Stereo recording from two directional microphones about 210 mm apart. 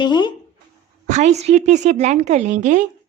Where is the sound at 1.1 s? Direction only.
35° right (ahead or behind).